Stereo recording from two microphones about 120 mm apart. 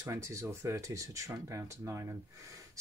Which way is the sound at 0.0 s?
25° right (ahead or behind).